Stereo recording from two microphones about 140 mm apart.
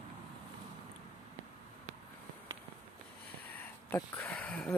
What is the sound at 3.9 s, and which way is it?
Speech, 10° left (ahead or behind).